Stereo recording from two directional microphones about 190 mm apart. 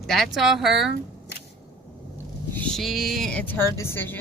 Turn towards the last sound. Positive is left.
turn(degrees=10)  # may be behind; listen again after turning